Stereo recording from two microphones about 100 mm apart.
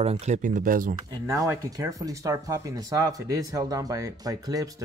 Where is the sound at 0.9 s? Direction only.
35° right (ahead or behind).